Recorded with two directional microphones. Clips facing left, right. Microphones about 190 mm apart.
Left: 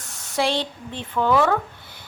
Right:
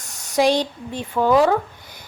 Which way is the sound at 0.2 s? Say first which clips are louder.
Right 5 dB; 15° right (ahead or behind).